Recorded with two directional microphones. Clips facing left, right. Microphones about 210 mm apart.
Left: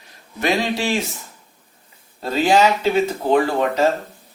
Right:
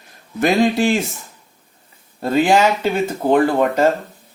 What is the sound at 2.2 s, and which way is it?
Speech, 50° right (ahead or behind).